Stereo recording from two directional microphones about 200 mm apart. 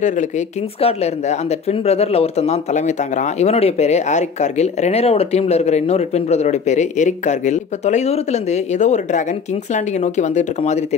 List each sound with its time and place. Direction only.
0.7 s speech: 30° left (ahead or behind)